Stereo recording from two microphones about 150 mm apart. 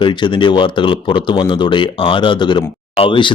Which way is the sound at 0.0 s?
30° left (ahead or behind).